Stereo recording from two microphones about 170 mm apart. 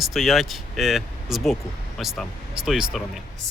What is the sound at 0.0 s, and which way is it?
Speech, centre (ahead or behind).